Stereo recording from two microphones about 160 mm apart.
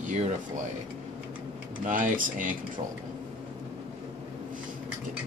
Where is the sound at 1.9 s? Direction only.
55° right (ahead or behind).